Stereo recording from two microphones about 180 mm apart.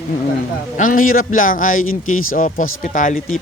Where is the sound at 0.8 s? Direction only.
50° left (ahead or behind).